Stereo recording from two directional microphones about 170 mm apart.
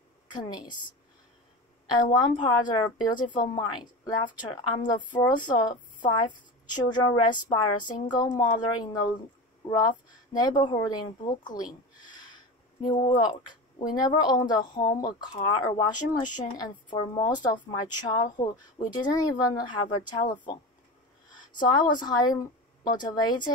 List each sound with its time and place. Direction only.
0.3 s a woman's voice: 25° left (ahead or behind)
2.1 s a woman's voice: 25° left (ahead or behind)